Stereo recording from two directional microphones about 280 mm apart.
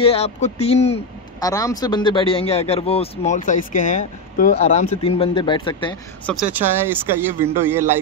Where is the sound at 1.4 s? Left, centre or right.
Centre.